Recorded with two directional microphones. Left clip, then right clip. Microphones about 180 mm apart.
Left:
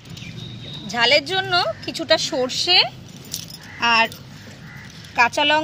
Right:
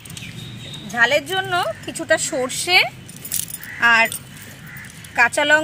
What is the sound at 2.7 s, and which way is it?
Speech, 10° right (ahead or behind).